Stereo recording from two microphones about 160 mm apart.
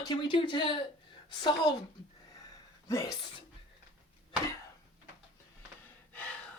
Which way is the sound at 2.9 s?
20° left (ahead or behind).